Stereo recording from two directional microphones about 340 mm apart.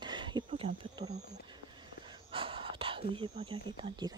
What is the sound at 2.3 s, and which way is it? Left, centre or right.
Speech, centre.